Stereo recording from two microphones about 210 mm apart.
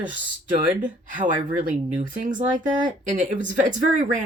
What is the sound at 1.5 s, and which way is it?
Speech, 40° right (ahead or behind).